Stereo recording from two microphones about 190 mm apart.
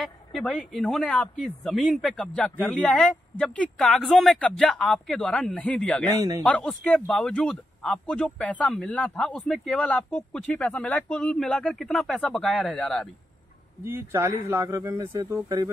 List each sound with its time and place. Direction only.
0.0 s speech: 5° left (ahead or behind)
6.0 s speech: 15° right (ahead or behind)
6.4 s speech: 5° left (ahead or behind)
13.8 s speech: 15° right (ahead or behind)